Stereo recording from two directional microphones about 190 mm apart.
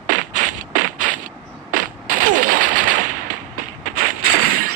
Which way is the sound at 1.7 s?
45° right (ahead or behind).